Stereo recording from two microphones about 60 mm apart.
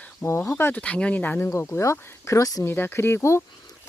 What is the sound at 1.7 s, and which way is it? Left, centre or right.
Speech, left.